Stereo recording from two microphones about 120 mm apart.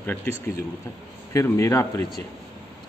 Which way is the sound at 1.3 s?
25° left (ahead or behind).